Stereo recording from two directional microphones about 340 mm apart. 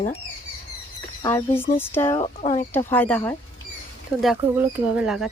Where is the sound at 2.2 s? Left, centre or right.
Centre.